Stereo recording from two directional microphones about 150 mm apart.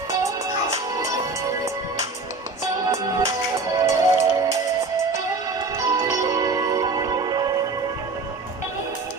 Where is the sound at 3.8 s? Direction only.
20° right (ahead or behind).